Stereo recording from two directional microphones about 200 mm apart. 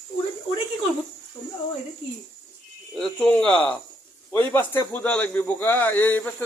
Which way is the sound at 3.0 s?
5° left (ahead or behind).